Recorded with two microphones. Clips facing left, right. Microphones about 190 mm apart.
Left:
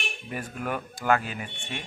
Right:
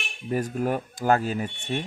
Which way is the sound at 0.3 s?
35° right (ahead or behind).